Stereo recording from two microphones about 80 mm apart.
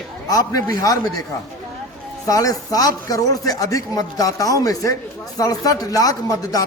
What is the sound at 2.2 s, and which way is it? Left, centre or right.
A man's voice, left.